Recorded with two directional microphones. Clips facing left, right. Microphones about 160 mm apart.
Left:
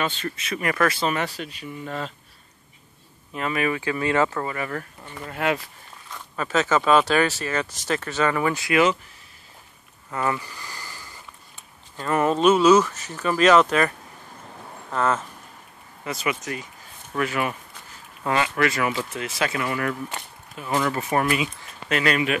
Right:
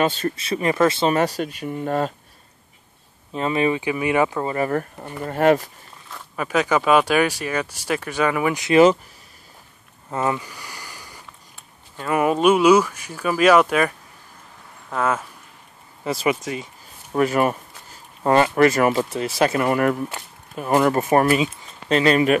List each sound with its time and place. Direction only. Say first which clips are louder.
0.0 s speech: right 6 dB; 40° right (ahead or behind)
1.1 s speech: right 7 dB; 40° right (ahead or behind)
3.3 s speech: right 4 dB; 25° right (ahead or behind)
4.5 s speech: right 7 dB; 35° right (ahead or behind)
6.0 s speech: right 2 dB; 10° right (ahead or behind)
10.1 s sniff: right 3 dB; 20° right (ahead or behind)
12.0 s speech: right 1 dB; 10° right (ahead or behind)
16.0 s speech: right 6 dB; 30° right (ahead or behind); by 19.0 s 45° right (ahead or behind)
19.1 s speech: right 7 dB; 35° right (ahead or behind)